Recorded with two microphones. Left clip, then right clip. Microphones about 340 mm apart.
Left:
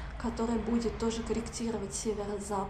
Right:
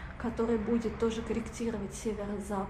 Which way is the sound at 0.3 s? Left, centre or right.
Centre.